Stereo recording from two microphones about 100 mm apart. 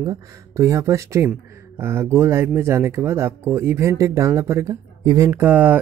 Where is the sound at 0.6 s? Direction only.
30° right (ahead or behind).